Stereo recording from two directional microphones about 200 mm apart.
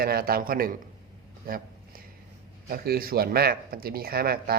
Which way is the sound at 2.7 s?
45° right (ahead or behind).